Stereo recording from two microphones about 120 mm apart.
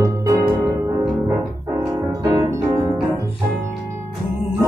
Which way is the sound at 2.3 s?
30° right (ahead or behind).